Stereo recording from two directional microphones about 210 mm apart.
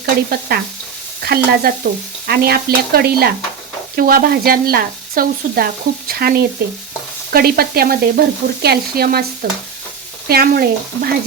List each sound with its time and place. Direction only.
0.0 s speech: 50° right (ahead or behind)
1.2 s sizzle: 50° right (ahead or behind)